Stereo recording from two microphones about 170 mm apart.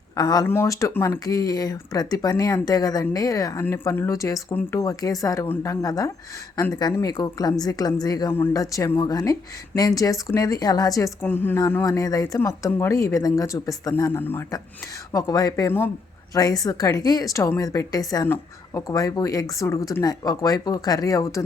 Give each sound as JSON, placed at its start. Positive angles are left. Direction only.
{"t": 0.2, "sound": "speech", "side_deg": 20}